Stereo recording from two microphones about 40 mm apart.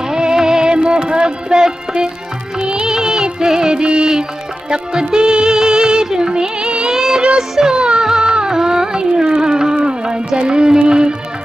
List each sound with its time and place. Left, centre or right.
0.1 s music: centre
6.9 s child singing: centre
7.7 s music: right
8.1 s a sound: centre
8.4 s music: centre